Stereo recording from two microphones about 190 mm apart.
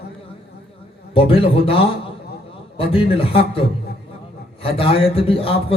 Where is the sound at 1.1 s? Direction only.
30° left (ahead or behind).